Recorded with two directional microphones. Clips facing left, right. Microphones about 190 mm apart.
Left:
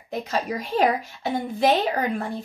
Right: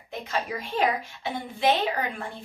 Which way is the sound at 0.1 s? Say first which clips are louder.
Left 4 dB; 40° left (ahead or behind).